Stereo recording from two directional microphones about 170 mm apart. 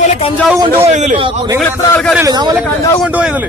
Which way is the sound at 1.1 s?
30° right (ahead or behind).